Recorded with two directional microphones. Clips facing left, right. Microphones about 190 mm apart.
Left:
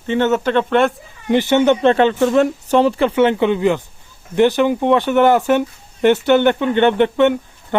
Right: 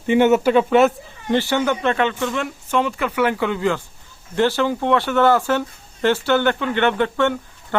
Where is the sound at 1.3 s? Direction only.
20° left (ahead or behind).